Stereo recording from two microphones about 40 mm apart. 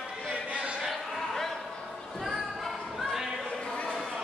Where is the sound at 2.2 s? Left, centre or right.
Centre.